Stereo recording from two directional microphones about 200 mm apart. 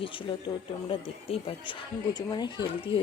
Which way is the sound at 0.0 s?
25° left (ahead or behind).